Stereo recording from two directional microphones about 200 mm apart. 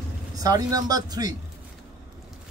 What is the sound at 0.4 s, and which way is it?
Speech, 20° right (ahead or behind).